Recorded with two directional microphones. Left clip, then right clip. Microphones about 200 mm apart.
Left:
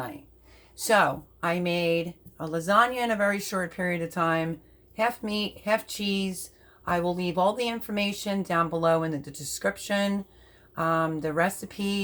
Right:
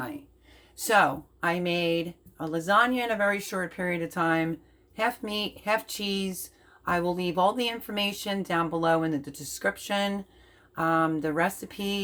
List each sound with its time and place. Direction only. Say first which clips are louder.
0.8 s speech: even; 10° right (ahead or behind)